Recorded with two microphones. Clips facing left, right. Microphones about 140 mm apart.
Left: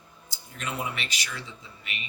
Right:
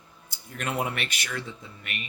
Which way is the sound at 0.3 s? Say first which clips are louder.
Right 3 dB; 55° right (ahead or behind).